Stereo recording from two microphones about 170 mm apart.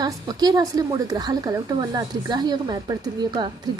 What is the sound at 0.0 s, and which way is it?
A woman's voice, 25° right (ahead or behind).